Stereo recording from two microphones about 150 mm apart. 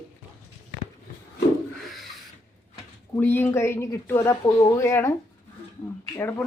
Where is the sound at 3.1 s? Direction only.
15° left (ahead or behind).